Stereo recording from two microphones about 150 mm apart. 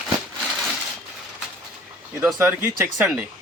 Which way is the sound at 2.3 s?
15° right (ahead or behind).